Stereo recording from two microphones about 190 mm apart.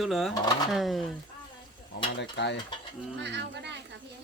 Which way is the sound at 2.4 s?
70° left (ahead or behind).